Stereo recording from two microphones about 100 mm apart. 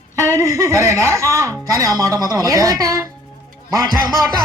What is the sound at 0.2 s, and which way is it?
A woman's voice, 30° right (ahead or behind).